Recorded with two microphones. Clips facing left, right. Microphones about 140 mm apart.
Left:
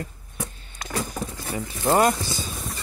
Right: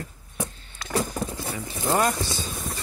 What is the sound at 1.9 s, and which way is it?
Speech, 20° left (ahead or behind).